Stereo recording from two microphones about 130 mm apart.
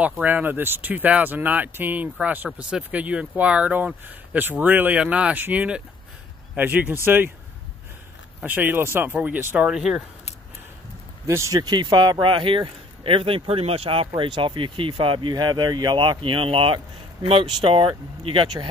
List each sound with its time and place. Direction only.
0.2 s speech: 15° right (ahead or behind)
8.4 s speech: 15° right (ahead or behind)
9.7 s speech: 5° right (ahead or behind)
11.2 s speech: 20° right (ahead or behind); by 18.7 s 40° right (ahead or behind)